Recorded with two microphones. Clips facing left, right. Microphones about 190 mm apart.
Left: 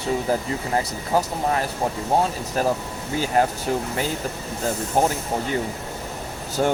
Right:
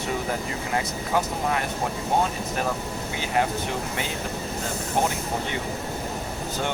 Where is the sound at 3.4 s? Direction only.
40° left (ahead or behind).